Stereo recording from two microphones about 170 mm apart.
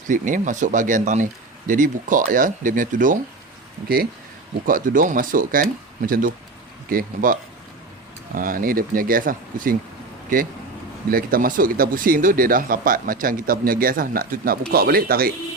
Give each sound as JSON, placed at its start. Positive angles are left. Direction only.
{"t": 0.1, "sound": "speech", "side_deg": -50}
{"t": 4.6, "sound": "speech", "side_deg": -55}
{"t": 6.9, "sound": "speech", "side_deg": -55}
{"t": 8.4, "sound": "speech", "side_deg": -55}